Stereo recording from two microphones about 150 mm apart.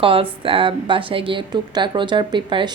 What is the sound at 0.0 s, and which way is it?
Speech, 35° right (ahead or behind).